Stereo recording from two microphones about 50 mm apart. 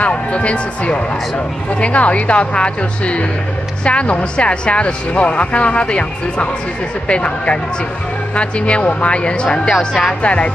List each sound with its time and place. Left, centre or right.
0.0 s speech: left; by 10.1 s centre
10.2 s speech: left